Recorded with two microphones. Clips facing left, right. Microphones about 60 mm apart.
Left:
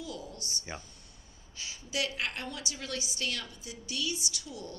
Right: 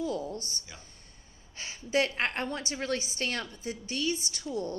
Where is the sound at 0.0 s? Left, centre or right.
Right.